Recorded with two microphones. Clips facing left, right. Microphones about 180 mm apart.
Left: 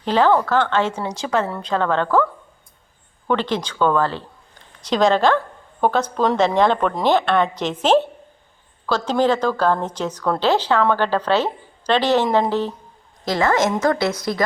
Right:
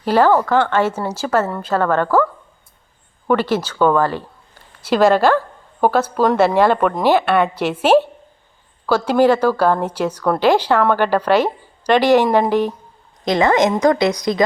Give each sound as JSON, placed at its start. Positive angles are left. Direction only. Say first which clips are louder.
{"t": 0.0, "sound": "a woman's voice", "louder": "right 3 dB", "side_deg": -10}